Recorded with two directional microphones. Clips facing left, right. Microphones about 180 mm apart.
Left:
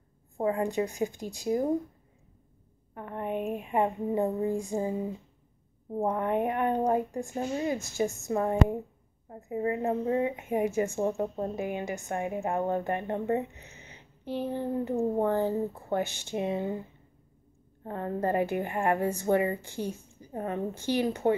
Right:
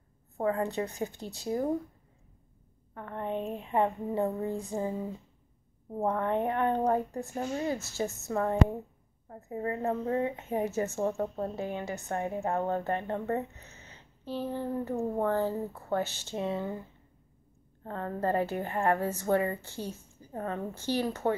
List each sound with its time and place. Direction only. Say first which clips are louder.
0.4 s a woman's voice: left 2 dB; 15° left (ahead or behind)
2.9 s a sound: left 1 dB; 15° left (ahead or behind)
5.9 s a woman's voice: left 1 dB; 15° left (ahead or behind)
17.8 s a woman's voice: left 1 dB; 15° left (ahead or behind)